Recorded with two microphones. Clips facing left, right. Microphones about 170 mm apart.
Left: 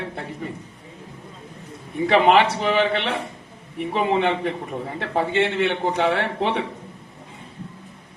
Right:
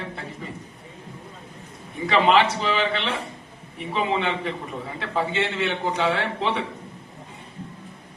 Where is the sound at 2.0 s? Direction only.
60° left (ahead or behind).